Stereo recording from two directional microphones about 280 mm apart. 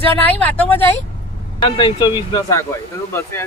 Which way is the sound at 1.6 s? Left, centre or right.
Centre.